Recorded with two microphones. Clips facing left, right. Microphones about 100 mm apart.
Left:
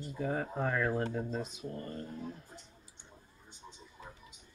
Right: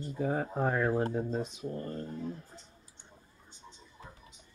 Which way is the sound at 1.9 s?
5° left (ahead or behind).